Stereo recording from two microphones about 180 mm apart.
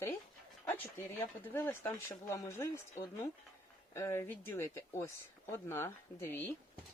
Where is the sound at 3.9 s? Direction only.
15° left (ahead or behind).